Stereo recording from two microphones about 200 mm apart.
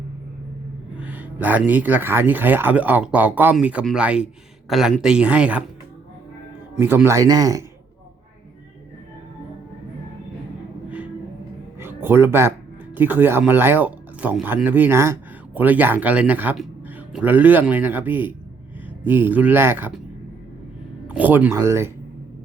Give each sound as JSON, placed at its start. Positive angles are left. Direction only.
{"t": 0.9, "sound": "speech", "side_deg": -10}
{"t": 6.7, "sound": "speech", "side_deg": -10}
{"t": 10.8, "sound": "music", "side_deg": -5}
{"t": 11.8, "sound": "a sound", "side_deg": -10}
{"t": 13.0, "sound": "speech", "side_deg": -10}
{"t": 21.1, "sound": "speech", "side_deg": -10}